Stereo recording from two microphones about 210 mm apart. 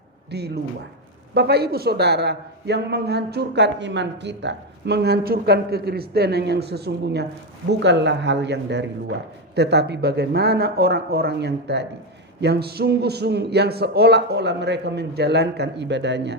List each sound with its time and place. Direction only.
0.3 s a man's voice: 50° right (ahead or behind)